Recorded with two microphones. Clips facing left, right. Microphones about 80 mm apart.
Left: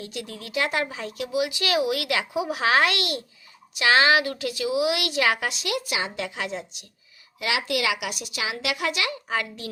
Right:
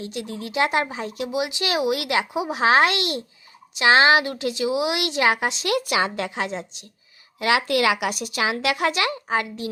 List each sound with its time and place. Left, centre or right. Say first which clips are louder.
0.0 s speech: right 5 dB; right
5.6 s speech: right 7 dB; right
6.1 s a woman's voice: right 3 dB; right